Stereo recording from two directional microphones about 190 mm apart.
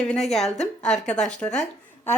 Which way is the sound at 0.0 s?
5° left (ahead or behind).